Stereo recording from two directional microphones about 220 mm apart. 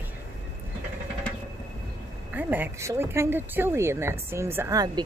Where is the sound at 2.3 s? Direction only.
10° right (ahead or behind).